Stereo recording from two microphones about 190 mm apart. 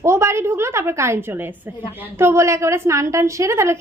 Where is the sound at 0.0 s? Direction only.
15° right (ahead or behind).